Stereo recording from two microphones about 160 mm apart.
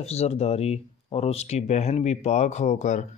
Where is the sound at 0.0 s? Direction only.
40° left (ahead or behind).